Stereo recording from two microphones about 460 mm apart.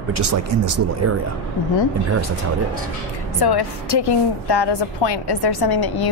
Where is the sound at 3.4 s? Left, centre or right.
Left.